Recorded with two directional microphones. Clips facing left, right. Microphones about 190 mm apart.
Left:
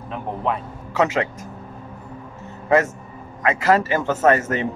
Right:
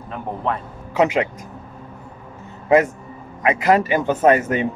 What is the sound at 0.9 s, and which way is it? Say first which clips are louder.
Speech: right 2 dB; 15° right (ahead or behind).